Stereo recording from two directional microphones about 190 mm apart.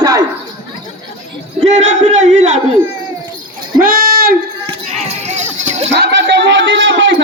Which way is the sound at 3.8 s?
50° right (ahead or behind).